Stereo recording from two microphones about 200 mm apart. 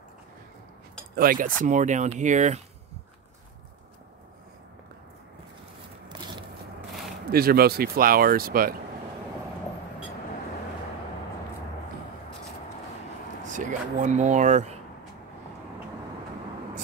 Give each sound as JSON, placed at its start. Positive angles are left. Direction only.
{"t": 1.1, "sound": "speech", "side_deg": -45}
{"t": 6.0, "sound": "a sound", "side_deg": -20}
{"t": 7.2, "sound": "speech", "side_deg": -50}
{"t": 13.5, "sound": "speech", "side_deg": -40}